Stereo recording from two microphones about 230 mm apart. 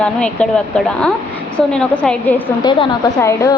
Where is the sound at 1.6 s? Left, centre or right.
Centre.